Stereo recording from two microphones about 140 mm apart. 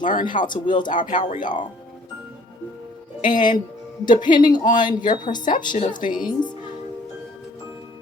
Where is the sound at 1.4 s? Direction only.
35° left (ahead or behind).